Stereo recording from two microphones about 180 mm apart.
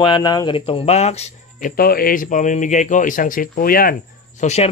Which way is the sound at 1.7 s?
55° left (ahead or behind).